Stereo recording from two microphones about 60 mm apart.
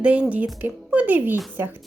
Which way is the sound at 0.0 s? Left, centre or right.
Right.